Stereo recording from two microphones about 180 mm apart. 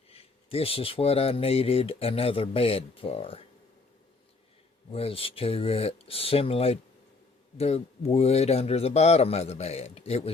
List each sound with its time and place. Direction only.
0.1 s speech: 35° left (ahead or behind)
4.9 s speech: 30° left (ahead or behind)